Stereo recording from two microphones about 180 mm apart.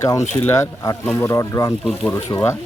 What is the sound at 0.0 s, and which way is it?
Speech, 20° left (ahead or behind).